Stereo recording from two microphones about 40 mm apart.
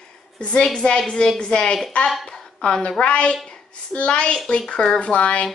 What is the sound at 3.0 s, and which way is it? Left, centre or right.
A woman's voice, left.